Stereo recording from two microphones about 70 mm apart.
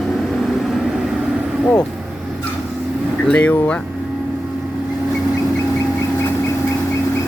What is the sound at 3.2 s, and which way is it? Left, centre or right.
Speech, centre.